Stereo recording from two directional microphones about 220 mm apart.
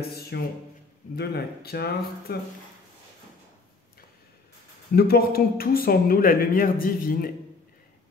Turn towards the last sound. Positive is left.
turn(degrees=40)  # may be behind; listen again after turning